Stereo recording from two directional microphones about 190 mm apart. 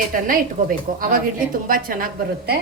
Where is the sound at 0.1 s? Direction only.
45° right (ahead or behind).